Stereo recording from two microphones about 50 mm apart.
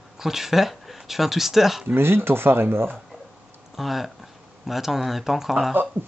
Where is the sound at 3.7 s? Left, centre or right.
Centre.